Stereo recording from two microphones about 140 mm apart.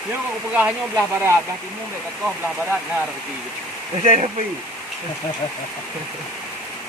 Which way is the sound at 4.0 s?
50° right (ahead or behind).